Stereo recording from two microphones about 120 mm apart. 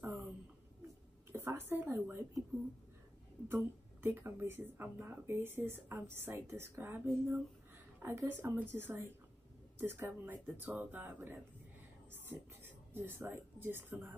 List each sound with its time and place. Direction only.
1.3 s speech: 20° right (ahead or behind)
3.4 s speech: 20° right (ahead or behind)